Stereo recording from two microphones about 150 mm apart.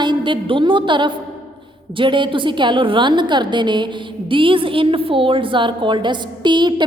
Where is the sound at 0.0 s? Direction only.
30° right (ahead or behind).